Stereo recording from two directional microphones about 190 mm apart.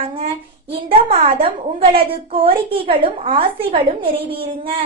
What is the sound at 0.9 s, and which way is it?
A woman's voice, 30° right (ahead or behind).